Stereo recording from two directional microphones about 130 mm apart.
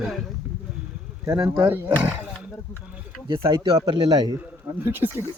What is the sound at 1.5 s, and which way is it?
Speech, 15° right (ahead or behind).